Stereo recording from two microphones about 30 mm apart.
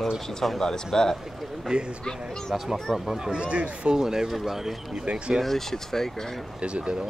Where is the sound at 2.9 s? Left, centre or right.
Centre.